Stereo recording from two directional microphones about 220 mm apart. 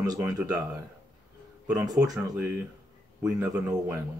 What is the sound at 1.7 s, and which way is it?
Speech, 15° right (ahead or behind).